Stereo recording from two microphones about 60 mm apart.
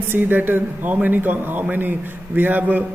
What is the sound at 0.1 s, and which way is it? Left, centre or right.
A man's voice, right.